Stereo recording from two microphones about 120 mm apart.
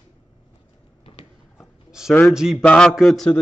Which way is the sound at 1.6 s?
5° right (ahead or behind).